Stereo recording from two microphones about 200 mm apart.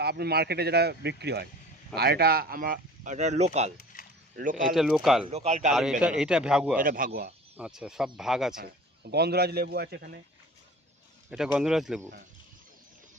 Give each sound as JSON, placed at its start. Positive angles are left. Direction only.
{"t": 0.0, "sound": "speech", "side_deg": -55}
{"t": 3.9, "sound": "a sound", "side_deg": 45}
{"t": 4.7, "sound": "a man's voice", "side_deg": 0}
{"t": 5.2, "sound": "speech", "side_deg": -30}
{"t": 5.7, "sound": "a man's voice", "side_deg": -5}
{"t": 6.7, "sound": "speech", "side_deg": -45}
{"t": 7.5, "sound": "a man's voice", "side_deg": -5}
{"t": 8.5, "sound": "speech", "side_deg": -50}
{"t": 11.5, "sound": "a man's voice", "side_deg": -5}